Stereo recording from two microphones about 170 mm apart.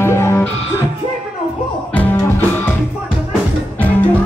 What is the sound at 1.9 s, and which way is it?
Music, 10° left (ahead or behind).